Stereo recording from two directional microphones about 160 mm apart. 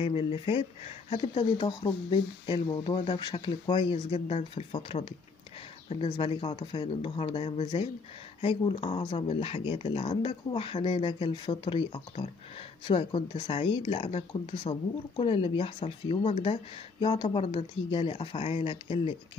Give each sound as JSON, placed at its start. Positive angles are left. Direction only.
{"t": 0.0, "sound": "speech", "side_deg": 35}
{"t": 1.6, "sound": "speech", "side_deg": 25}